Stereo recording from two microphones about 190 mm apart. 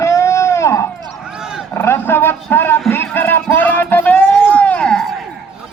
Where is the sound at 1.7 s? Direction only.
10° left (ahead or behind).